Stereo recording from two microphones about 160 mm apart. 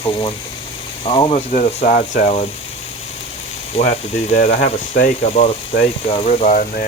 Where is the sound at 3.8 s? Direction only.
35° left (ahead or behind).